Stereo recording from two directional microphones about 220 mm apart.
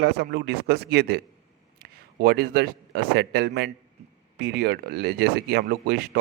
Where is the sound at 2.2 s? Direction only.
45° right (ahead or behind).